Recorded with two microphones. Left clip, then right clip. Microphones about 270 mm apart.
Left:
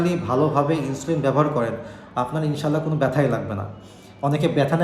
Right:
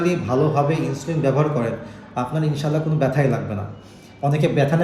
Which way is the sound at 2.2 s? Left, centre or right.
Centre.